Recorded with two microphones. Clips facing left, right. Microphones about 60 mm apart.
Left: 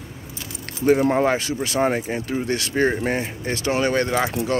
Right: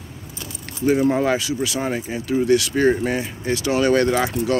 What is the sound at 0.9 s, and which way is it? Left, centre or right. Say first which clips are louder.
Speech: even; left.